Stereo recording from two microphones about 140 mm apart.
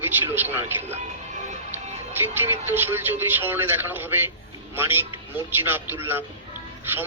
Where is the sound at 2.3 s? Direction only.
15° right (ahead or behind).